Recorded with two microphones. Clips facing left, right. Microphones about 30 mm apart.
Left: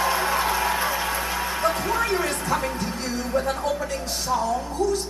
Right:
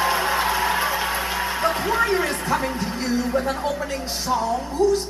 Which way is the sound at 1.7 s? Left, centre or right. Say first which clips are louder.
Right 3 dB; right.